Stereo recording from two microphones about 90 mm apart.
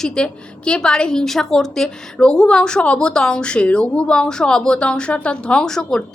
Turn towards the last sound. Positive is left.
turn(degrees=5)  # may be behind; listen again after turning